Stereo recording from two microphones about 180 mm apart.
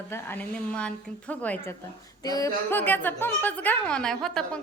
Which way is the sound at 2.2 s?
20° left (ahead or behind).